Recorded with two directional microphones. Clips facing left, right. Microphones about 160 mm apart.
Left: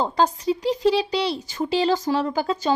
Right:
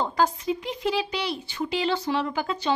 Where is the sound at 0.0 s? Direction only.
35° left (ahead or behind).